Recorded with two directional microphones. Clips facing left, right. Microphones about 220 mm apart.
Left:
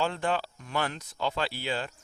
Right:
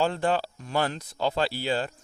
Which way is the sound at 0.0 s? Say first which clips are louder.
Right 4 dB; 35° right (ahead or behind).